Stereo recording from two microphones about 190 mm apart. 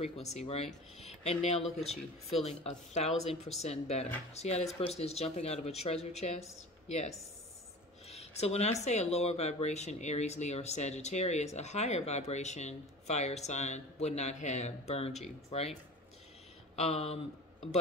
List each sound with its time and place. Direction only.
0.0 s speech: 35° left (ahead or behind)
8.1 s a sound: 35° left (ahead or behind)
8.8 s speech: 35° left (ahead or behind)
16.7 s speech: 35° left (ahead or behind)